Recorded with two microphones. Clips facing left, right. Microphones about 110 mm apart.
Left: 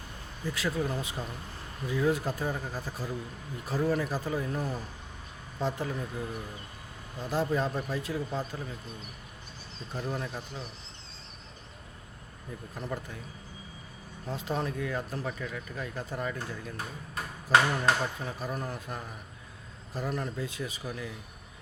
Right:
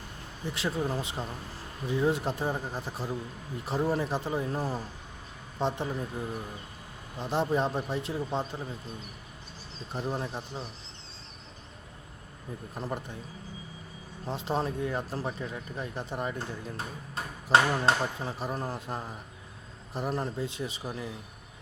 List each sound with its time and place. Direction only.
0.4 s speech: 25° right (ahead or behind)
7.2 s speech: 25° right (ahead or behind)
9.9 s speech: 30° right (ahead or behind)
12.7 s speech: 25° right (ahead or behind)
14.3 s speech: 25° right (ahead or behind)